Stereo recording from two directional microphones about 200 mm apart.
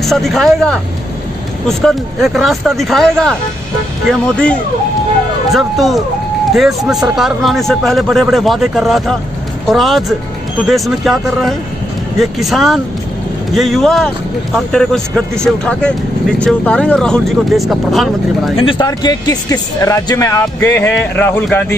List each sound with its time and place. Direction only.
0.0 s speech: centre (ahead or behind)
18.6 s speech: 25° left (ahead or behind)